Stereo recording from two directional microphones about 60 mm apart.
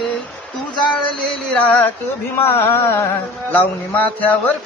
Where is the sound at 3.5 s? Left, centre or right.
Left.